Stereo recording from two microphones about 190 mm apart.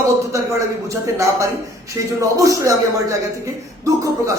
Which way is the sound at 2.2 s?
15° right (ahead or behind).